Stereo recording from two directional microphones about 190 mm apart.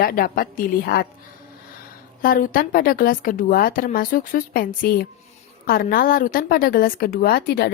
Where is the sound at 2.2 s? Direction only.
50° left (ahead or behind).